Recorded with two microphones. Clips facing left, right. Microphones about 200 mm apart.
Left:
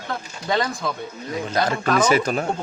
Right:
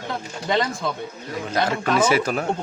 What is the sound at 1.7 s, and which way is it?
Speech, 5° right (ahead or behind).